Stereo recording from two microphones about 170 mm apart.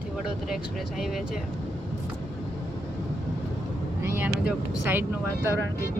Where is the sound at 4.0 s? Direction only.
10° right (ahead or behind).